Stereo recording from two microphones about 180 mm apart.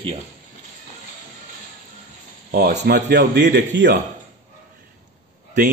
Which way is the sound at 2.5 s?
65° right (ahead or behind).